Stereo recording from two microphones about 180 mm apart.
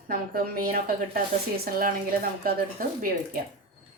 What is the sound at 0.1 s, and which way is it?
Speech, 55° right (ahead or behind).